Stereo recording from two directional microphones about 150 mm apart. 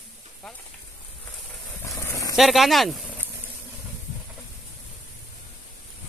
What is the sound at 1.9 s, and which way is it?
Vehicle, 20° left (ahead or behind).